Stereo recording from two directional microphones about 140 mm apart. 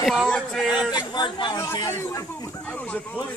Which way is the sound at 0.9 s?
30° left (ahead or behind).